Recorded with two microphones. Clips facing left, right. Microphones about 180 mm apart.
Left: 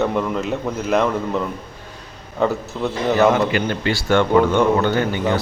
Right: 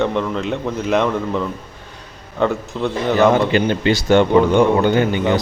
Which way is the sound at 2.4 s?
5° left (ahead or behind).